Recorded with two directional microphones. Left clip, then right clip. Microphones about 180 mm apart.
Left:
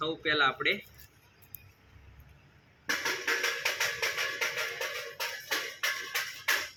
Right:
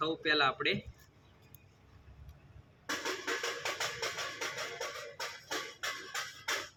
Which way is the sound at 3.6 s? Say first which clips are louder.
Left 6 dB; 65° right (ahead or behind).